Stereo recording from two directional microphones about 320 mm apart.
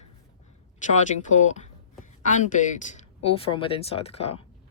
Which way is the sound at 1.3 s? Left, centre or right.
Left.